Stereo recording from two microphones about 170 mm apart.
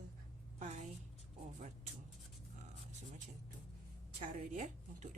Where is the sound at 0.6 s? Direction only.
45° right (ahead or behind).